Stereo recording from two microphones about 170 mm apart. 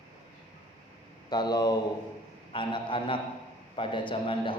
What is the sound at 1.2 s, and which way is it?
Speech, 25° left (ahead or behind).